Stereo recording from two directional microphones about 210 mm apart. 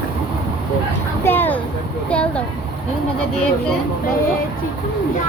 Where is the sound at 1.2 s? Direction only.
10° left (ahead or behind).